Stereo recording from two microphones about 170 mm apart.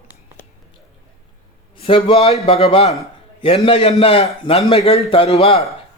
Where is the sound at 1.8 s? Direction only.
30° left (ahead or behind).